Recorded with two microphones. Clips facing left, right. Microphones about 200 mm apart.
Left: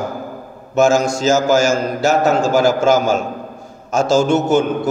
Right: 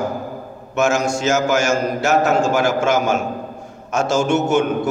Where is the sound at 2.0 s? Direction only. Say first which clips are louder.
Left 3 dB; 35° left (ahead or behind).